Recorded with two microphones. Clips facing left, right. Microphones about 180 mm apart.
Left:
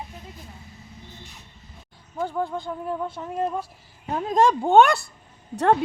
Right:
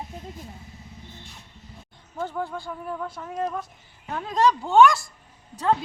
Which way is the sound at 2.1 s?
10° left (ahead or behind).